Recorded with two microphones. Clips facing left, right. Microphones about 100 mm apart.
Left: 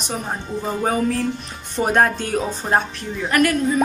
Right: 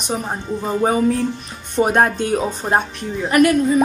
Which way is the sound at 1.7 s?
5° right (ahead or behind).